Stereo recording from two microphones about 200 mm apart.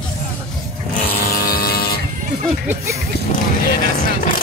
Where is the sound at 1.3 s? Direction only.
50° left (ahead or behind).